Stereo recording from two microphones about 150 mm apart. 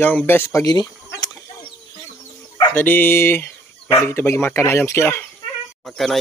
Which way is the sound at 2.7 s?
15° left (ahead or behind).